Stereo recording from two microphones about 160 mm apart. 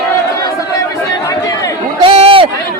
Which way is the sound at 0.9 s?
20° left (ahead or behind).